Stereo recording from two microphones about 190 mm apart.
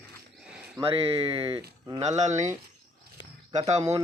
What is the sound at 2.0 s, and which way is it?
Speech, 35° right (ahead or behind).